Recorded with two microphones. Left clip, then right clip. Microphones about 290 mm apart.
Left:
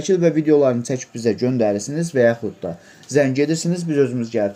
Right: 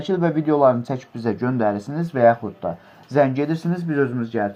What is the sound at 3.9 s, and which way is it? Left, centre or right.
Speech, right.